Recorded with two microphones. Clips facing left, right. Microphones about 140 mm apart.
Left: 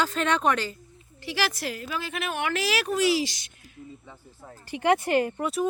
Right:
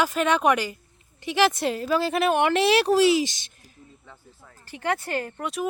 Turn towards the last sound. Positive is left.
turn(degrees=0)  # may be behind; listen again after turning